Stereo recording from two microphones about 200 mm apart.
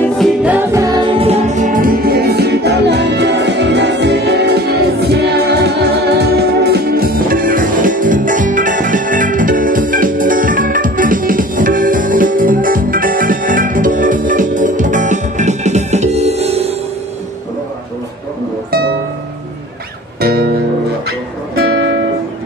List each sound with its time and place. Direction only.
0.2 s music: 5° right (ahead or behind); by 16.7 s 30° right (ahead or behind)
20.2 s music: 50° right (ahead or behind)